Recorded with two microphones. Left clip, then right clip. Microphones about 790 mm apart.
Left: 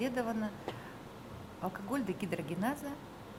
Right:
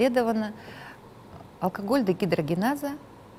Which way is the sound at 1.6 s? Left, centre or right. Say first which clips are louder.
Right 12 dB; right.